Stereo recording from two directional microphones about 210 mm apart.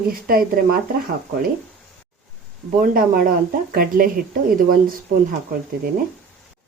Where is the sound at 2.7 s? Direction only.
40° right (ahead or behind).